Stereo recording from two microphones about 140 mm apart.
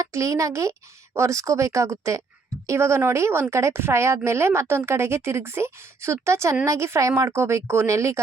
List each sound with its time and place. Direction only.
0.0 s a woman's voice: 20° right (ahead or behind)